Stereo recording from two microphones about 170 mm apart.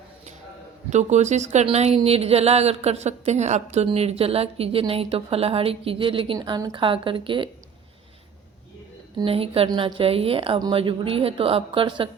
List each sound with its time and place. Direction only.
0.9 s speech: 45° right (ahead or behind)
9.1 s speech: 35° right (ahead or behind)